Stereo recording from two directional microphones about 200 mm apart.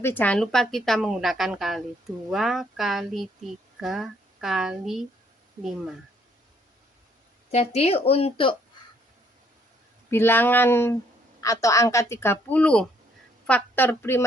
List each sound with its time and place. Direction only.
0.0 s speech: 10° left (ahead or behind)
7.5 s speech: 30° left (ahead or behind)
10.1 s a woman's voice: 10° left (ahead or behind)